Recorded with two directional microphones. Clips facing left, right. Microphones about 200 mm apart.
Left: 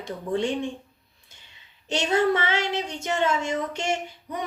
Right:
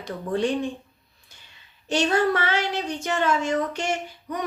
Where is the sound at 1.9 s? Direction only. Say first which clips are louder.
Right 1 dB; 20° left (ahead or behind).